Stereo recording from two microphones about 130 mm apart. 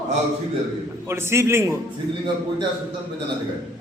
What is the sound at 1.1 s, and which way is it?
Speech, 20° right (ahead or behind).